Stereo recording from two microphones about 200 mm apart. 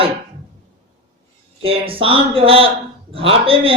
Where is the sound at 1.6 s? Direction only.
30° right (ahead or behind).